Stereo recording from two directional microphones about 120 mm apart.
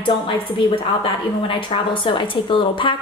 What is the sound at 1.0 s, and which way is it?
A woman's voice, 45° left (ahead or behind).